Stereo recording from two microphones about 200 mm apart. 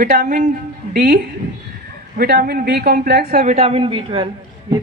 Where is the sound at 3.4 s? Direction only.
30° right (ahead or behind).